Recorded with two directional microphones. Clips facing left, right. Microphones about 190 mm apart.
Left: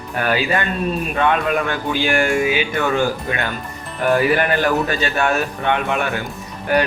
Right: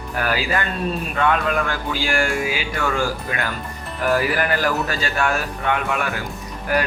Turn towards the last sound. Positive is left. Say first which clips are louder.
# left 4 dB
turn(degrees=25)  # may be behind; listen again after turning